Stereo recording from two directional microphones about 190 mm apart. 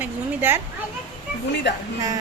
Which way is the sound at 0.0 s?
10° right (ahead or behind).